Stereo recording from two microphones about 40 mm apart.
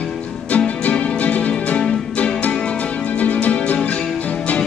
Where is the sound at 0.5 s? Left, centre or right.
Left.